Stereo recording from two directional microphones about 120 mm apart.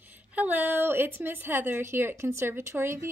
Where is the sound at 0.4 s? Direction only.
15° right (ahead or behind).